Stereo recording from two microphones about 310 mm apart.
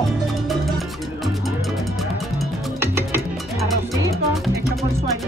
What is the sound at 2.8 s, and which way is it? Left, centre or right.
Music, centre.